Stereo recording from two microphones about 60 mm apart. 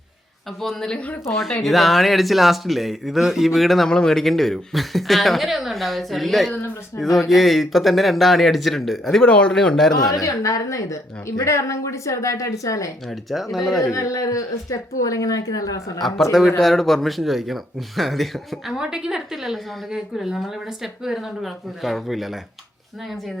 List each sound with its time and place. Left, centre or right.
0.6 s speech: centre
1.3 s a woman's voice: centre
3.8 s a woman's voice: centre
9.9 s a woman's voice: left
13.1 s a woman's voice: centre
13.9 s speech: left
16.6 s a woman's voice: centre
18.8 s a woman's voice: centre